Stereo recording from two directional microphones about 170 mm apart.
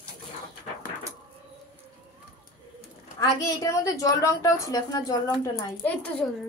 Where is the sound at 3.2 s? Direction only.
20° left (ahead or behind).